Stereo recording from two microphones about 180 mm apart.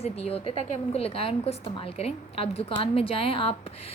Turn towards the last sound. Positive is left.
turn(degrees=30)  # may be behind; listen again after turning